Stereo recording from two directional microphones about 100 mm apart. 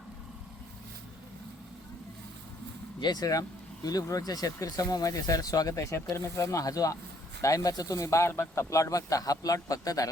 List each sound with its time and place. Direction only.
3.0 s speech: 40° left (ahead or behind)